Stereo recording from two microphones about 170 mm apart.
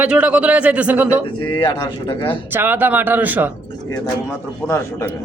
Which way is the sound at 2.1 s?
30° left (ahead or behind).